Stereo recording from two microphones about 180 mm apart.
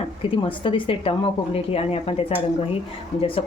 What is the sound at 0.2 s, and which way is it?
A woman's voice, 30° left (ahead or behind).